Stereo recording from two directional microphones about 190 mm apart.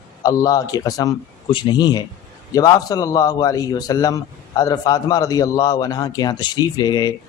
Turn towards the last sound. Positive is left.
turn(degrees=20)  # may be behind; listen again after turning